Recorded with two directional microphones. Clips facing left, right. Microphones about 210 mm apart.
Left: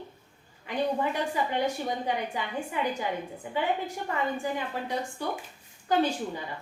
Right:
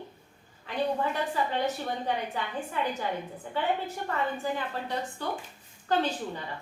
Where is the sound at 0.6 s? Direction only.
15° left (ahead or behind).